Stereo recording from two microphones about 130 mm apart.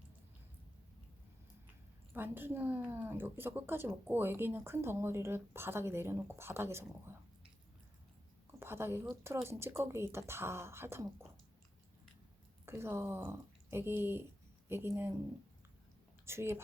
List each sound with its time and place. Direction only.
2.1 s speech: 15° right (ahead or behind)
8.5 s a sound: 15° right (ahead or behind)
9.2 s speech: 20° right (ahead or behind)
12.6 s speech: 20° right (ahead or behind)
16.2 s speech: 20° right (ahead or behind)